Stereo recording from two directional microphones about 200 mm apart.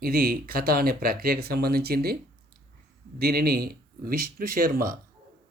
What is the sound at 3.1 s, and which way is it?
Speech, 50° right (ahead or behind).